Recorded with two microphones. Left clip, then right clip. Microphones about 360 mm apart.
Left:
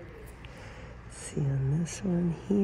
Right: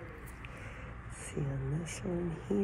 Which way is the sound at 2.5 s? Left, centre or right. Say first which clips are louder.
Left 4 dB; left.